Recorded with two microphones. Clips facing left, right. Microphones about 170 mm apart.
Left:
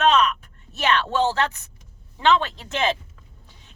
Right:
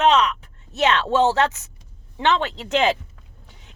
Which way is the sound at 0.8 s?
20° right (ahead or behind).